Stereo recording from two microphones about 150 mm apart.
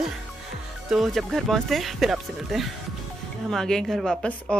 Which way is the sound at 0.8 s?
Centre (ahead or behind).